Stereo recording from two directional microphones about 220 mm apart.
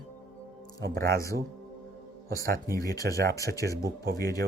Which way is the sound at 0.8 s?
45° right (ahead or behind).